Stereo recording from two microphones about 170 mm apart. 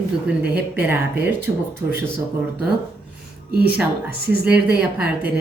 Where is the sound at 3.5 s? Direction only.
65° right (ahead or behind).